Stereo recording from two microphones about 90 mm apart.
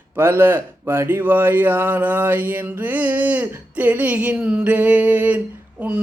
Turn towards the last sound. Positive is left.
turn(degrees=-15)  # may be behind; listen again after turning